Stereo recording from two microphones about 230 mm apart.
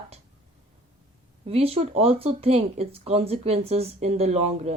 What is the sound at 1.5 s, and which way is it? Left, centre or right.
A woman's voice, right.